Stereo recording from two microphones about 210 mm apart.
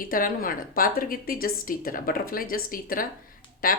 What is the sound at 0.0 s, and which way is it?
A woman's voice, 40° left (ahead or behind).